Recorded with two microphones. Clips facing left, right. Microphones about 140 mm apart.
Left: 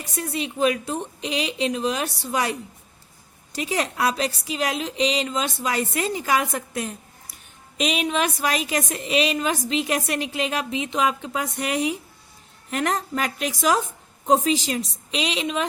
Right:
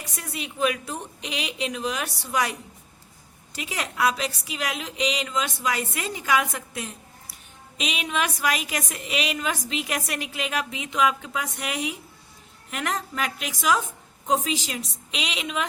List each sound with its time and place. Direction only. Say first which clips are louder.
0.2 s a woman's voice: left 4 dB; 25° left (ahead or behind)